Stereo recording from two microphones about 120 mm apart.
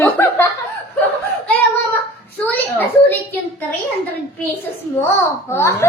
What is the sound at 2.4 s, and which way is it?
Speech, 15° left (ahead or behind).